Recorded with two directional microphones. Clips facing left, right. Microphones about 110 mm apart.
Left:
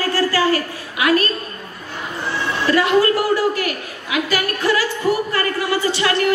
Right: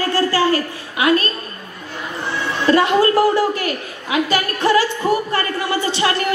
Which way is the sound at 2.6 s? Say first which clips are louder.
Right 1 dB; 30° right (ahead or behind).